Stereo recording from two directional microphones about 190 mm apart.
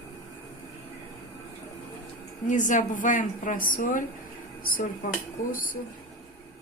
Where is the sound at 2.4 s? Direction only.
40° left (ahead or behind).